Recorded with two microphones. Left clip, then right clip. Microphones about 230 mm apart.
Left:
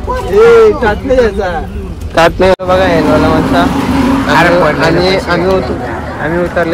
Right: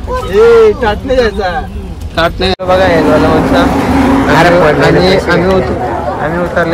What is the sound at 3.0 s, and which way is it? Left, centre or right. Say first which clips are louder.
Vehicle: right 1 dB; centre.